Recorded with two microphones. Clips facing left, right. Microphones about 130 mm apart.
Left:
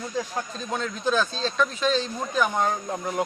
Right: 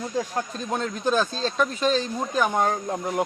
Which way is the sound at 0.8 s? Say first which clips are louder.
Right 1 dB; 45° right (ahead or behind).